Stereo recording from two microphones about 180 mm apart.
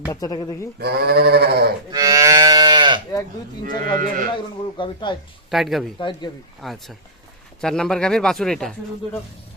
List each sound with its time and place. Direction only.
0.1 s speech: 20° left (ahead or behind)
0.8 s sheep: 65° right (ahead or behind)
1.9 s moo: 20° right (ahead or behind)
3.7 s speech: 50° right (ahead or behind)
4.8 s speech: 25° left (ahead or behind)
5.5 s speech: centre (ahead or behind)
6.0 s speech: 25° left (ahead or behind)
6.6 s speech: centre (ahead or behind)